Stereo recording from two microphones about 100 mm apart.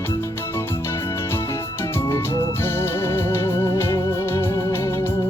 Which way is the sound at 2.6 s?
25° left (ahead or behind).